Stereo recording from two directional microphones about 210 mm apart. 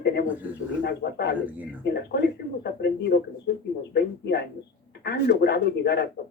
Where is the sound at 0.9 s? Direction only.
50° left (ahead or behind).